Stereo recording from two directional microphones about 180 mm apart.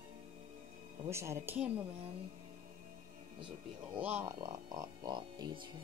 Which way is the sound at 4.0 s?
10° right (ahead or behind).